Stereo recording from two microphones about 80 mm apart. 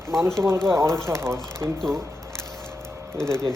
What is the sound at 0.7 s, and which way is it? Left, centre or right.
Speech, right.